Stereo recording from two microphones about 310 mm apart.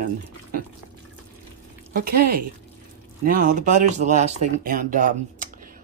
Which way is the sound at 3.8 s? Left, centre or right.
Right.